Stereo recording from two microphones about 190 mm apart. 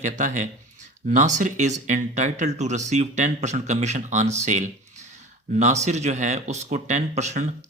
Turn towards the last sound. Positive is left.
turn(degrees=-35)  # may be behind; listen again after turning